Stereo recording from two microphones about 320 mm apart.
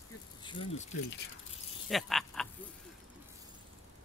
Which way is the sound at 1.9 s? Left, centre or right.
Centre.